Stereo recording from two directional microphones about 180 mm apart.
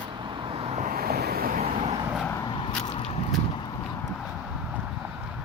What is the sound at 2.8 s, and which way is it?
Biting, 35° left (ahead or behind).